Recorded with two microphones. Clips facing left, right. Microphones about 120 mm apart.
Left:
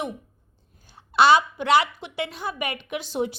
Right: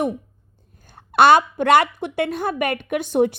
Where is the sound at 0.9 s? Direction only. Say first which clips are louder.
Right 4 dB; 55° right (ahead or behind).